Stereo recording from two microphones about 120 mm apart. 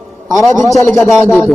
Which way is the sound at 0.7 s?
Centre (ahead or behind).